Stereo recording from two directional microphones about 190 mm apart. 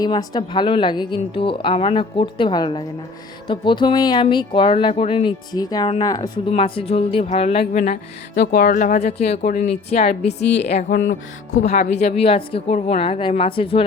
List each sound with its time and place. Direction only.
0.0 s a woman's voice: 20° left (ahead or behind); by 7.9 s 45° left (ahead or behind)
8.4 s a woman's voice: 55° left (ahead or behind); by 13.8 s 30° left (ahead or behind)